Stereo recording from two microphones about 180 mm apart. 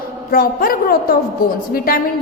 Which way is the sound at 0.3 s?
55° left (ahead or behind).